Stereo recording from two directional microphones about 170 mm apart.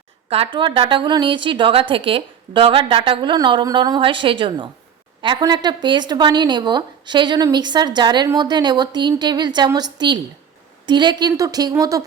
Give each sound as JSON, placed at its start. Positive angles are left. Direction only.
{"t": 0.3, "sound": "a woman's voice", "side_deg": -35}